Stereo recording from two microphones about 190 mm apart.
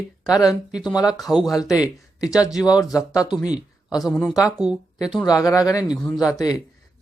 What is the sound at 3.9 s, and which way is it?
Speech, centre (ahead or behind).